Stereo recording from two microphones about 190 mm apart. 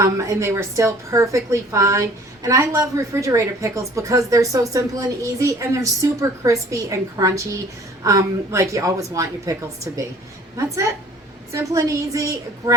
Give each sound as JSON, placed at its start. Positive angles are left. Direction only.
{"t": 0.0, "sound": "a woman's voice", "side_deg": -15}
{"t": 11.5, "sound": "a woman's voice", "side_deg": -15}